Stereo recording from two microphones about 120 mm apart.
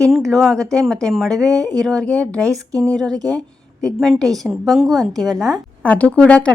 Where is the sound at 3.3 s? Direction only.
5° left (ahead or behind).